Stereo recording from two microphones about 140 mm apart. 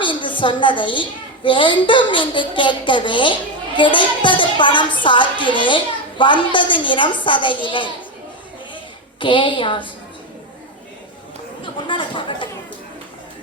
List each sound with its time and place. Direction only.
0.0 s a woman's voice: 35° left (ahead or behind)
9.2 s a woman's voice: 35° left (ahead or behind)
11.6 s a sound: 35° left (ahead or behind)